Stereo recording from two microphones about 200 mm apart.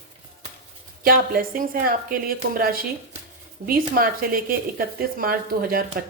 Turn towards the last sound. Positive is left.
turn(degrees=-45)  # may be behind; listen again after turning